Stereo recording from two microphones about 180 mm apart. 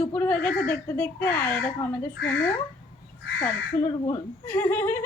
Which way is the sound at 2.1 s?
70° left (ahead or behind).